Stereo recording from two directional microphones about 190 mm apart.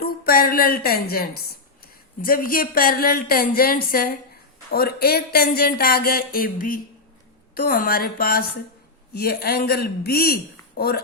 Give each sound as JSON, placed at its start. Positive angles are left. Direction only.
{"t": 0.0, "sound": "a woman's voice", "side_deg": 50}